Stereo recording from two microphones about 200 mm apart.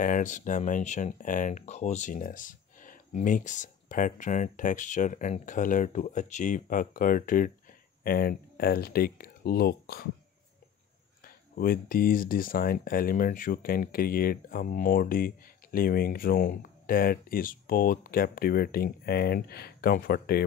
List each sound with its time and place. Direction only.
0.0 s speech: 40° left (ahead or behind)
11.2 s speech: 45° left (ahead or behind)